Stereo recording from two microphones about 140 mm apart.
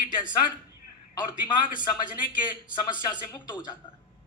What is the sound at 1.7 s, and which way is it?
Speech, 70° left (ahead or behind).